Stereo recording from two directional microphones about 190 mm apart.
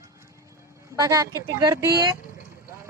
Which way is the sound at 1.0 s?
20° right (ahead or behind).